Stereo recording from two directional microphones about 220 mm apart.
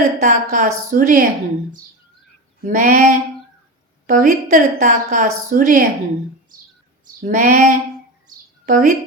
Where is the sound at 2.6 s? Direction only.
35° right (ahead or behind).